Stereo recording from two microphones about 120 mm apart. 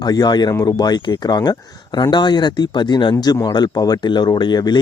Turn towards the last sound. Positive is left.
turn(degrees=35)  # may be behind; listen again after turning